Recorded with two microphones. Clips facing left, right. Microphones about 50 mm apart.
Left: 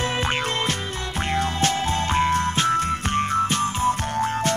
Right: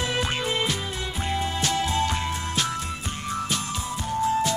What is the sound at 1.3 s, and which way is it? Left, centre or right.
Music, left.